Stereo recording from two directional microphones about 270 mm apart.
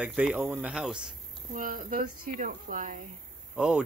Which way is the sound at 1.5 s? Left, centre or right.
Right.